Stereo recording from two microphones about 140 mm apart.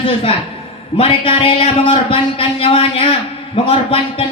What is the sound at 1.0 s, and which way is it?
A man's voice, 40° left (ahead or behind).